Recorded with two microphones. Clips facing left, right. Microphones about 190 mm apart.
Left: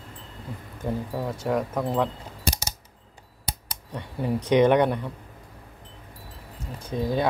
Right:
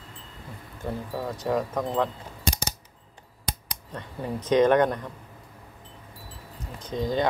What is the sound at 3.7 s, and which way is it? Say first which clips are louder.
Speech: left 2 dB; 10° left (ahead or behind).